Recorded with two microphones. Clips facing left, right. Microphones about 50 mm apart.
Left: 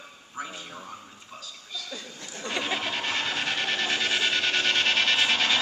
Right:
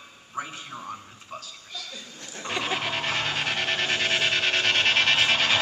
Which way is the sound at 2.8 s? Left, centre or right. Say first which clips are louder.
Right 2 dB; right.